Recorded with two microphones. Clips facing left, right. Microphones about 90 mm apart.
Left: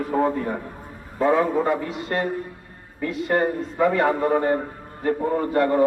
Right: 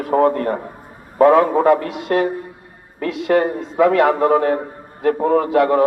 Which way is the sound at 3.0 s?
85° right.